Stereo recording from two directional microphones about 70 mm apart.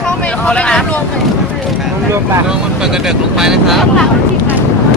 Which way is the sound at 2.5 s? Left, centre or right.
Centre.